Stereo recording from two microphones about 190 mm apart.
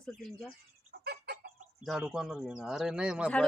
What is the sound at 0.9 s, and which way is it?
Chicken, 60° right (ahead or behind).